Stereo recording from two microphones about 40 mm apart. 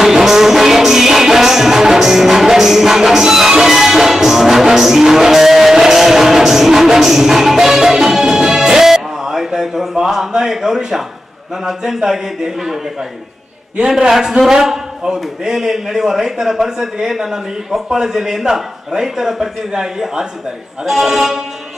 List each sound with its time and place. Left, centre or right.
0.0 s music: centre
11.6 s a man's voice: centre
13.7 s a man's voice: centre